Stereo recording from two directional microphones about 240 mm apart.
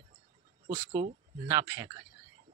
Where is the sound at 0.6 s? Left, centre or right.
Right.